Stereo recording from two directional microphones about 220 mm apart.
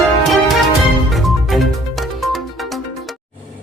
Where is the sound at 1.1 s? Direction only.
Centre (ahead or behind).